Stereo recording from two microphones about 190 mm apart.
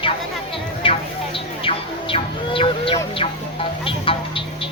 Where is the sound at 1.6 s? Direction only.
30° left (ahead or behind).